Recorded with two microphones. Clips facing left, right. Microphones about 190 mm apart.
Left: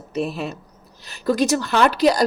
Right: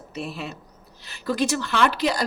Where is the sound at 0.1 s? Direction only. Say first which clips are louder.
Left 8 dB; 40° left (ahead or behind).